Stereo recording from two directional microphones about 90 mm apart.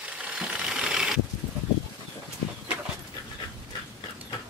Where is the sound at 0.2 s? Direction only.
10° right (ahead or behind).